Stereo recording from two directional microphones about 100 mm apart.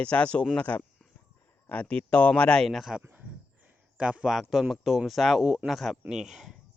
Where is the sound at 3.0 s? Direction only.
15° right (ahead or behind).